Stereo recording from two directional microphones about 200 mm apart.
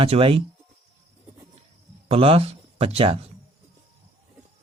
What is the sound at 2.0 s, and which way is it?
Speech, 30° right (ahead or behind).